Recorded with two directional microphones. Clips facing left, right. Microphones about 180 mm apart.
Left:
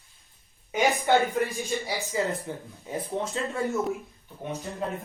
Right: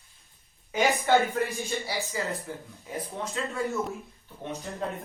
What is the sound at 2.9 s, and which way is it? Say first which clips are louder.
Speech: left 4 dB; 25° left (ahead or behind).